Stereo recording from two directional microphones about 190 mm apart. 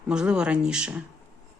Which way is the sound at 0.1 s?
5° right (ahead or behind).